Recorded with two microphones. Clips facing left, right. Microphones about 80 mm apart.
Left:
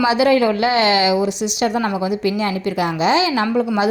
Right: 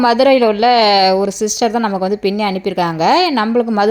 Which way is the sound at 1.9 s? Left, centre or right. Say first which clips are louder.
Right 4 dB; right.